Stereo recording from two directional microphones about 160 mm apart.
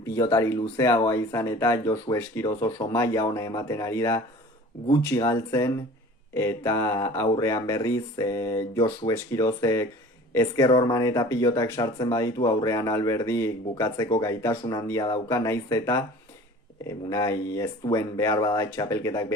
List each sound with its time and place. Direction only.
0.2 s speech: 15° left (ahead or behind)
17.1 s speech: 20° left (ahead or behind)